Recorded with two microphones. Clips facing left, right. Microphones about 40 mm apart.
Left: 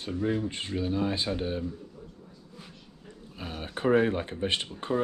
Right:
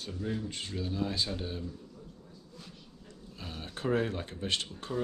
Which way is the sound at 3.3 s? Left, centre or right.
Left.